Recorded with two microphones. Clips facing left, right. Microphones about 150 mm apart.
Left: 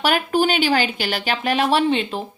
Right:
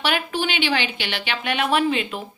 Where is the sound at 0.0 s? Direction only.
45° left (ahead or behind).